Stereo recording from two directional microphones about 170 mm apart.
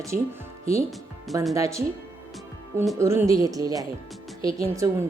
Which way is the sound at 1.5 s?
20° right (ahead or behind).